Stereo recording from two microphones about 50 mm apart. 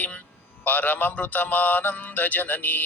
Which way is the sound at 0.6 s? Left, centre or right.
Left.